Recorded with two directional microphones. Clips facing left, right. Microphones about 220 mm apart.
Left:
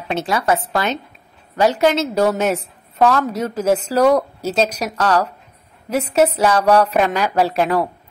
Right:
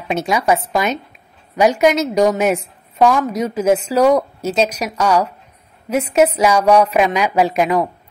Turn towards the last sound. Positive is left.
turn(degrees=-10)  # may be behind; listen again after turning